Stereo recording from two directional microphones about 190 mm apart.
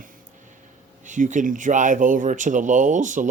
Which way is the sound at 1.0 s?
40° right (ahead or behind).